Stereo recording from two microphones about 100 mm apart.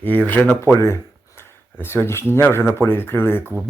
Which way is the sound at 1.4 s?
25° left (ahead or behind).